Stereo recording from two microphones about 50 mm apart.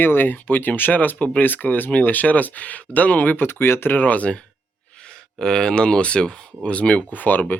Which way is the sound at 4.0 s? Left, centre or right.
Left.